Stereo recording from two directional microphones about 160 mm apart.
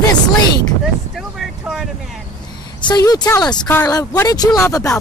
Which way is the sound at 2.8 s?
25° left (ahead or behind).